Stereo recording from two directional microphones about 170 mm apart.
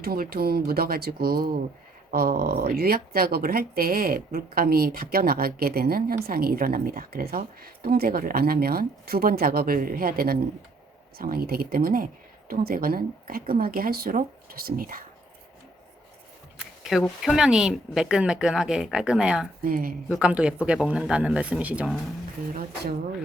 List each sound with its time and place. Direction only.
0.0 s speech: 60° right (ahead or behind)
16.6 s speech: centre (ahead or behind)
19.6 s speech: 55° right (ahead or behind)
20.1 s speech: 5° right (ahead or behind)